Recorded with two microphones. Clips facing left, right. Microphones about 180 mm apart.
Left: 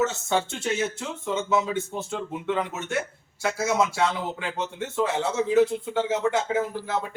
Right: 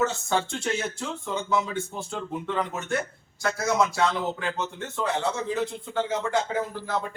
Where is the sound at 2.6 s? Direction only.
5° left (ahead or behind).